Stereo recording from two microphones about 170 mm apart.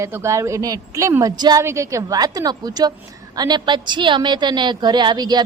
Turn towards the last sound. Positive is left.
turn(degrees=-25)  # may be behind; listen again after turning